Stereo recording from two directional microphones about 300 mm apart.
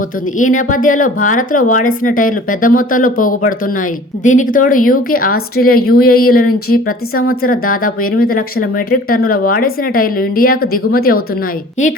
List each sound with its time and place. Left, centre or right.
0.3 s speech: left